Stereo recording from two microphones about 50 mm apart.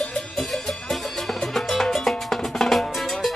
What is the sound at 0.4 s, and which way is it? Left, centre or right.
Music, centre.